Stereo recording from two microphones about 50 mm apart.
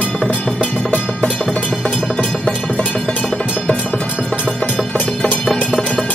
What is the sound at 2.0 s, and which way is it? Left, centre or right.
Music, centre.